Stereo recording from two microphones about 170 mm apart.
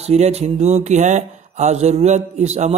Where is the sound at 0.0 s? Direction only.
40° right (ahead or behind).